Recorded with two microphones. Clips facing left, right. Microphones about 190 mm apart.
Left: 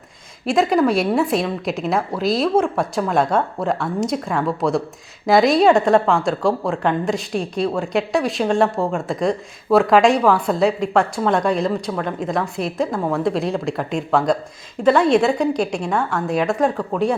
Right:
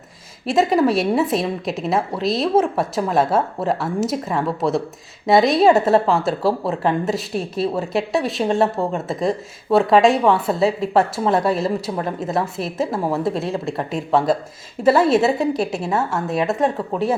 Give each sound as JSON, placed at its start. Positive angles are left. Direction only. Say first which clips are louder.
{"t": 0.4, "sound": "speech", "louder": "even", "side_deg": 0}
{"t": 12.9, "sound": "a woman's voice", "louder": "even", "side_deg": -30}
{"t": 13.1, "sound": "speech", "louder": "left 2 dB", "side_deg": 0}